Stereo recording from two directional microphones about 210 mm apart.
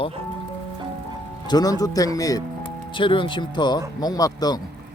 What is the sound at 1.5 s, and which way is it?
A man's voice, 20° left (ahead or behind).